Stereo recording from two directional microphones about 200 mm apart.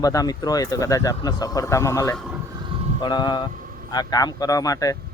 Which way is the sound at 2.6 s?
30° right (ahead or behind).